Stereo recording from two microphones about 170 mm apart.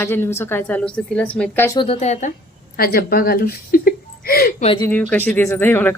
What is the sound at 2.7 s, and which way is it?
A woman's voice, 60° left (ahead or behind).